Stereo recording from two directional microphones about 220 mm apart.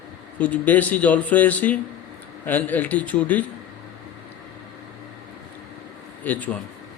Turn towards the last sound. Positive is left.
turn(degrees=5)  # may be behind; listen again after turning